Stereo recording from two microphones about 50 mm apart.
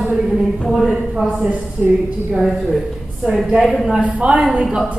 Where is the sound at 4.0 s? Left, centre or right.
Right.